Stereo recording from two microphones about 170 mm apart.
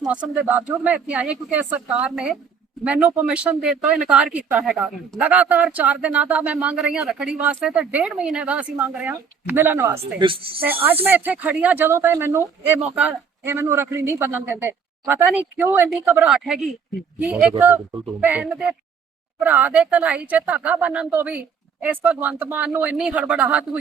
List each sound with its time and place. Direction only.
0.1 s speech: 10° right (ahead or behind)
10.2 s speech: 30° right (ahead or behind)
11.0 s speech: 10° right (ahead or behind)
17.6 s speech: 15° right (ahead or behind)